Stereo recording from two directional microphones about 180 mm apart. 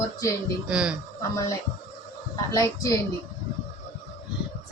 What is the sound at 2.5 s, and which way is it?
Speech, 20° left (ahead or behind).